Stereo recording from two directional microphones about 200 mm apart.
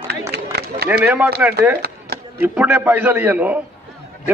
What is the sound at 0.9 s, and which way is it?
A man's voice, 10° right (ahead or behind).